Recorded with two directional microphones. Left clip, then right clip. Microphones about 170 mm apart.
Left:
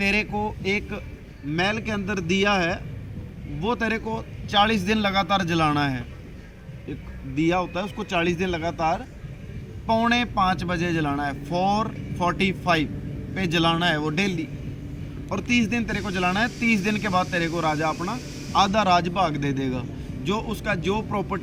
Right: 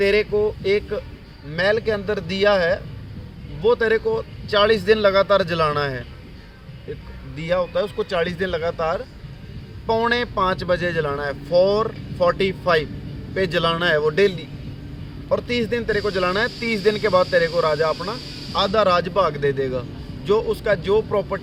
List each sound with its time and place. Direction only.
0.0 s speech: 25° right (ahead or behind)
7.3 s speech: 30° right (ahead or behind)